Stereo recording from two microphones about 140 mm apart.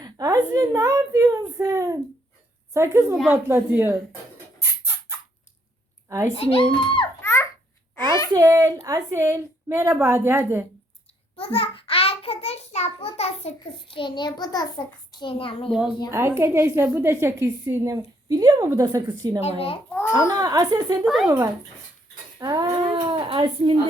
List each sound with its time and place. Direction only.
0.0 s a woman's voice: 25° right (ahead or behind)
6.1 s a child's voice: 25° right (ahead or behind)
6.3 s speech: 40° left (ahead or behind)
7.2 s babbling: 15° left (ahead or behind)
8.3 s a woman's voice: 25° right (ahead or behind)
11.3 s a child's voice: 40° left (ahead or behind)
16.1 s a woman's voice: 20° right (ahead or behind)
19.4 s a child's voice: 45° left (ahead or behind)
19.9 s a child's voice: 15° left (ahead or behind)
20.1 s a woman's voice: 30° right (ahead or behind)
21.0 s speech: 5° right (ahead or behind)
21.2 s a woman's voice: 20° right (ahead or behind); by 23.8 s 40° right (ahead or behind)